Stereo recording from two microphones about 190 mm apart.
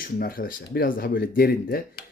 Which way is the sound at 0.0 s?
50° left (ahead or behind).